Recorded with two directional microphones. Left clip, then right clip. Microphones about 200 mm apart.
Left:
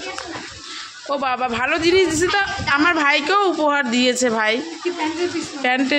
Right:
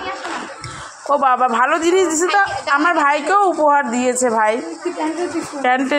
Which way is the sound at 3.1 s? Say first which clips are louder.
Right 2 dB; 20° left (ahead or behind).